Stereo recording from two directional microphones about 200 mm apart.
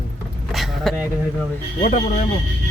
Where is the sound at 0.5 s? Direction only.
Centre (ahead or behind).